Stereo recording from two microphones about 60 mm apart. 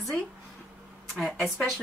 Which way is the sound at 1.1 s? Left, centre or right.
Centre.